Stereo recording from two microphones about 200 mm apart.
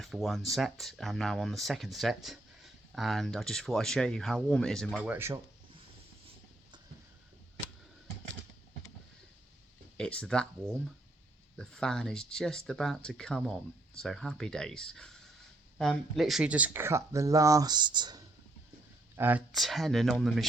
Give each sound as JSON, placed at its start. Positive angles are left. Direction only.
{"t": 0.0, "sound": "speech", "side_deg": 0}
{"t": 5.0, "sound": "speech", "side_deg": -10}
{"t": 10.0, "sound": "speech", "side_deg": 5}
{"t": 19.1, "sound": "speech", "side_deg": -10}